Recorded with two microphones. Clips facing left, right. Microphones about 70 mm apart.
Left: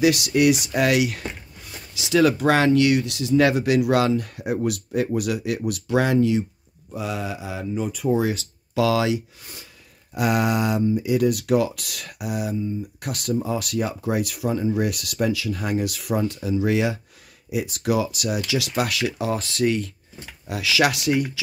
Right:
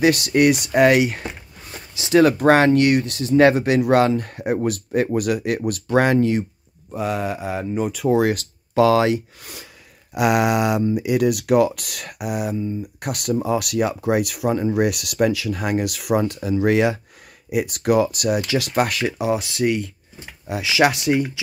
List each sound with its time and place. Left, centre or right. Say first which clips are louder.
0.0 s speech: right 2 dB; right
7.9 s speech: right 4 dB; right
8.7 s speech: right 5 dB; right
10.1 s speech: right 4 dB; right
19.1 s speech: right 3 dB; centre
20.4 s speech: right 3 dB; right